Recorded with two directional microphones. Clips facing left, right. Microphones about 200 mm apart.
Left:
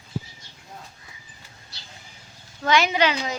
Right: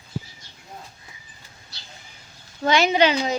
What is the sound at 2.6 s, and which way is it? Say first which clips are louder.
Speech: right 3 dB; 30° right (ahead or behind).